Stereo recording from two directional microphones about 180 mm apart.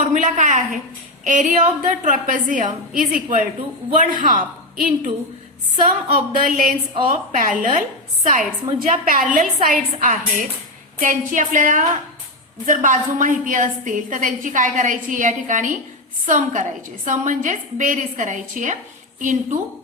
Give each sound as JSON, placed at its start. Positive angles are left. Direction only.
{"t": 0.1, "sound": "a woman's voice", "side_deg": -45}